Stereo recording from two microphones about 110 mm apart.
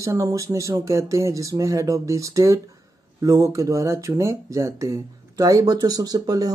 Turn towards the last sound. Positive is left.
turn(degrees=-35)  # may be behind; listen again after turning